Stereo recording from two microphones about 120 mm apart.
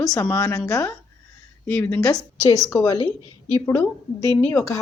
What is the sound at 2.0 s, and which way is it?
Speech, 30° left (ahead or behind).